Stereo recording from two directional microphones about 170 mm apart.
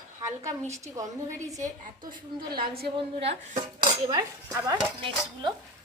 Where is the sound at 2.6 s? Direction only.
65° right (ahead or behind).